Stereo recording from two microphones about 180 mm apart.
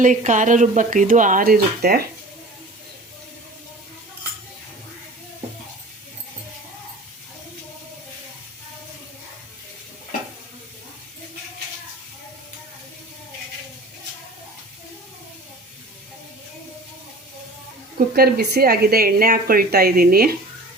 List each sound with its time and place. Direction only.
0.0 s speech: 45° right (ahead or behind); by 2.0 s 60° right (ahead or behind)
17.9 s a woman's voice: 60° right (ahead or behind)